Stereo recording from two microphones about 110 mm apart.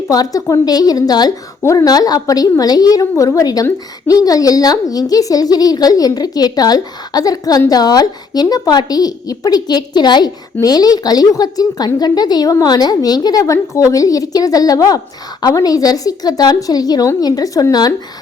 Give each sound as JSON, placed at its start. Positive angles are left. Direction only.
{"t": 0.1, "sound": "a woman's voice", "side_deg": 35}